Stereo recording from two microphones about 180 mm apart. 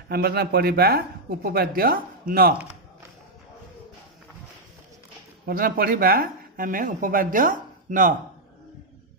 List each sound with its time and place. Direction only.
0.1 s speech: 60° right (ahead or behind)
5.5 s speech: 55° right (ahead or behind)